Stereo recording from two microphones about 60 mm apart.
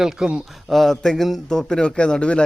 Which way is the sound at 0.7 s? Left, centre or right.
Centre.